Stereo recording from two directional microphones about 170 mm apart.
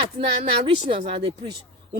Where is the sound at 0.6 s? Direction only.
30° right (ahead or behind).